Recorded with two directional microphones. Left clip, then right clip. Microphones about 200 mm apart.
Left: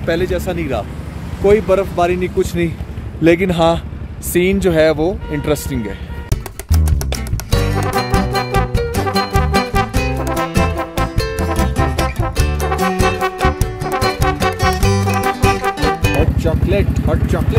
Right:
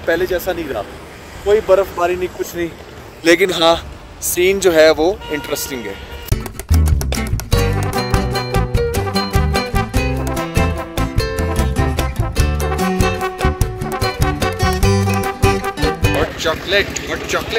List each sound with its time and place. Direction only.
0.0 s speech: centre (ahead or behind)
0.3 s speech: 15° right (ahead or behind)
6.3 s music: centre (ahead or behind)
16.3 s speech: 25° left (ahead or behind)